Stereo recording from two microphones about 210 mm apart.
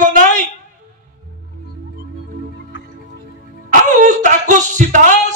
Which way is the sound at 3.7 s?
35° right (ahead or behind).